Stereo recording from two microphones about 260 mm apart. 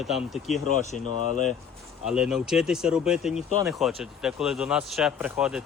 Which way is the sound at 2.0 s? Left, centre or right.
Centre.